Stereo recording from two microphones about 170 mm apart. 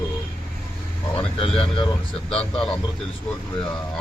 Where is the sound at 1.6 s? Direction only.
30° left (ahead or behind).